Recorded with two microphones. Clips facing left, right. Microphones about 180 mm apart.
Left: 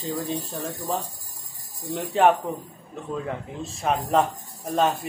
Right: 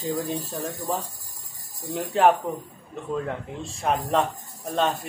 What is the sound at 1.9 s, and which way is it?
Speech, centre (ahead or behind).